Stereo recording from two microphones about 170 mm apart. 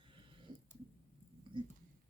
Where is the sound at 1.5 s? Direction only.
30° right (ahead or behind).